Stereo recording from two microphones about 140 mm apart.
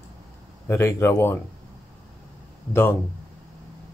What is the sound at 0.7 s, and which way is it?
Speech, 20° left (ahead or behind).